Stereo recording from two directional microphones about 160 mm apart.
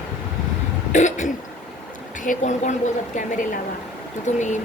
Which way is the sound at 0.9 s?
50° left (ahead or behind).